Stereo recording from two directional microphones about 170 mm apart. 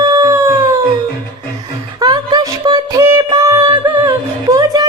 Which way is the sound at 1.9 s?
25° right (ahead or behind).